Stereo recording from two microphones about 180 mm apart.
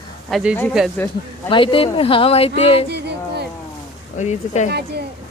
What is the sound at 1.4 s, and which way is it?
Speech, 30° left (ahead or behind).